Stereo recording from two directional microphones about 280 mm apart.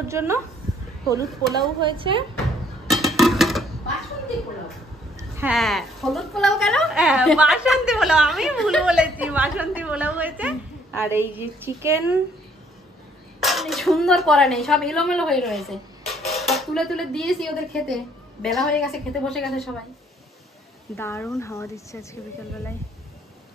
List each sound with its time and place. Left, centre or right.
0.1 s a woman's voice: centre
1.6 s a woman's voice: centre
2.9 s a sound: centre
5.4 s a woman's voice: centre
13.4 s a woman's voice: centre
20.9 s speech: centre